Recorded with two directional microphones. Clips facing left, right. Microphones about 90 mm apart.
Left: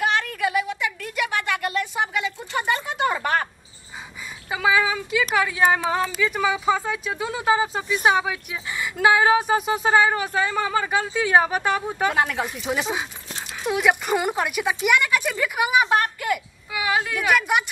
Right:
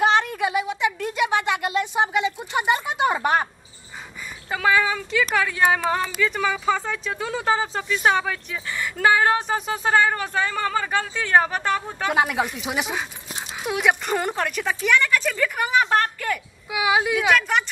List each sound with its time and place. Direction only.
0.0 s a sound: 25° right (ahead or behind)
4.5 s speech: 10° left (ahead or behind)
12.1 s speech: 15° right (ahead or behind)
13.3 s dog: 10° right (ahead or behind)
13.7 s speech: centre (ahead or behind)
16.7 s a woman's voice: 15° right (ahead or behind)
17.3 s speech: 10° left (ahead or behind)